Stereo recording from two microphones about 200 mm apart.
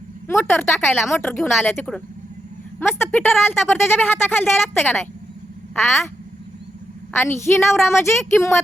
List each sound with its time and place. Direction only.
0.4 s a woman's voice: 10° left (ahead or behind)
7.1 s a woman's voice: 10° left (ahead or behind)